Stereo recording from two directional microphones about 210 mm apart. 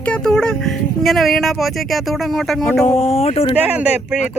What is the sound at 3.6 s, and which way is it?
Speech, 5° right (ahead or behind).